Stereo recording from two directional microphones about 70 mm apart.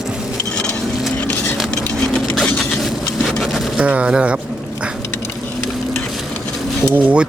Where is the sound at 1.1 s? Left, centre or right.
Left.